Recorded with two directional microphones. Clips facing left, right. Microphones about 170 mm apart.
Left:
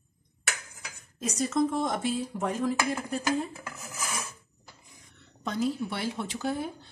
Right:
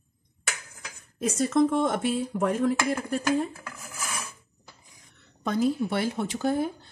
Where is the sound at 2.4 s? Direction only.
55° right (ahead or behind).